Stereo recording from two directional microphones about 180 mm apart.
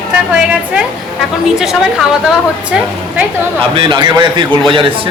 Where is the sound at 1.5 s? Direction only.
Centre (ahead or behind).